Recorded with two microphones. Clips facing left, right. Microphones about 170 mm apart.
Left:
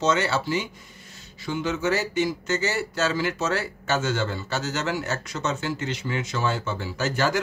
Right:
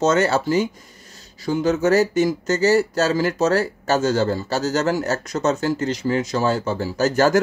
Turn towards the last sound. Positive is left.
turn(degrees=-40)  # may be behind; listen again after turning